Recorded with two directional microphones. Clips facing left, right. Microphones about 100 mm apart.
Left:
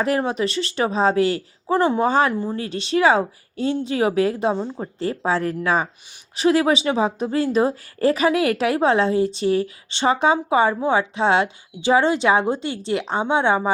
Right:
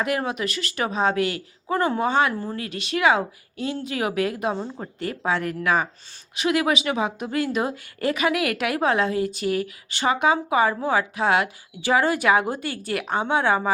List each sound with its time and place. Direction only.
0.2 s a woman's voice: 30° left (ahead or behind)
2.3 s speech: 15° left (ahead or behind)
2.6 s speech: 30° left (ahead or behind)
4.5 s speech: 10° left (ahead or behind)
4.9 s a woman's voice: 30° left (ahead or behind)